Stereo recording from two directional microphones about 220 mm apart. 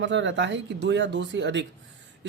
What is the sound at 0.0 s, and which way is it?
Speech, 55° right (ahead or behind).